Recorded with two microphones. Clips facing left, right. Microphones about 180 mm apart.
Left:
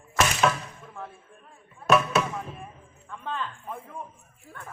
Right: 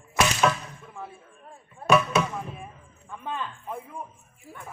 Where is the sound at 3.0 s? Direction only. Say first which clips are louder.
Even; 10° right (ahead or behind).